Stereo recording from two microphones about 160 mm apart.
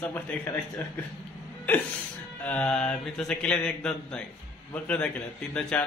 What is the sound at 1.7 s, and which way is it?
A man's voice, 10° left (ahead or behind).